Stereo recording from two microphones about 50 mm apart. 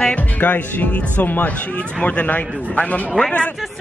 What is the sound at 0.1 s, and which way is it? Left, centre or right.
A man's voice, left.